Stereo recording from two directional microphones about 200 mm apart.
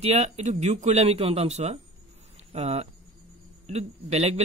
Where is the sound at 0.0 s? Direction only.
35° right (ahead or behind).